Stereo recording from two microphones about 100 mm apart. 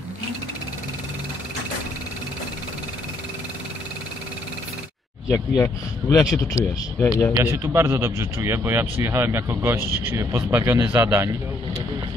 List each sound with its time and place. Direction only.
5.3 s speech: 30° left (ahead or behind)
7.5 s speech: 30° right (ahead or behind)